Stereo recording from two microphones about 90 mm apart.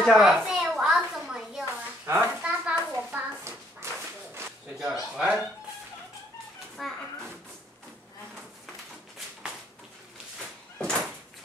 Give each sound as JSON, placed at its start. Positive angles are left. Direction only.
{"t": 0.0, "sound": "a child's voice", "side_deg": 0}
{"t": 0.7, "sound": "a sound", "side_deg": -5}
{"t": 2.0, "sound": "a sound", "side_deg": -20}
{"t": 3.4, "sound": "dog", "side_deg": -30}
{"t": 4.9, "sound": "speech", "side_deg": -5}
{"t": 6.8, "sound": "speech", "side_deg": 0}
{"t": 10.8, "sound": "door", "side_deg": 5}